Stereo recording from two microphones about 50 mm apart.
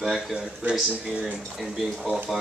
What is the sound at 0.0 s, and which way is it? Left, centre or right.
Speech, centre.